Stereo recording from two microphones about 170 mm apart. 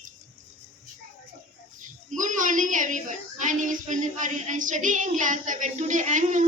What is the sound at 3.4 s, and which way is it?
A man's voice, 50° right (ahead or behind).